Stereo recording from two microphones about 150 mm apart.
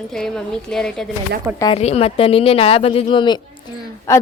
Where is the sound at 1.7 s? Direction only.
45° left (ahead or behind).